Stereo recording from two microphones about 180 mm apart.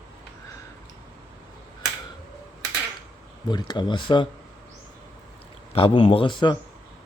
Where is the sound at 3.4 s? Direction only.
25° left (ahead or behind).